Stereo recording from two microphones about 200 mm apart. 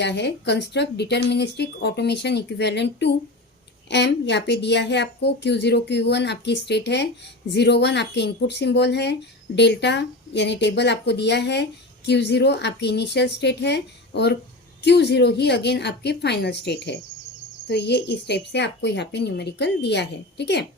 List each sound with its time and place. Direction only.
0.0 s a woman's voice: 60° left (ahead or behind)